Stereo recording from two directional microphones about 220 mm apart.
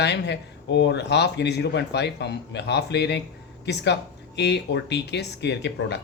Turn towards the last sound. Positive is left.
turn(degrees=50)  # may be behind; listen again after turning